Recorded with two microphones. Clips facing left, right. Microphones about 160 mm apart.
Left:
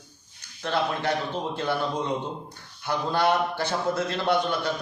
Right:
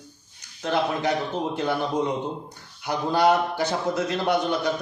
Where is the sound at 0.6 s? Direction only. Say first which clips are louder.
Right 2 dB; 15° right (ahead or behind).